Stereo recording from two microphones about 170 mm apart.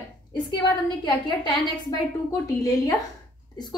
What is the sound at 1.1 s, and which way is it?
A woman's voice, 25° left (ahead or behind).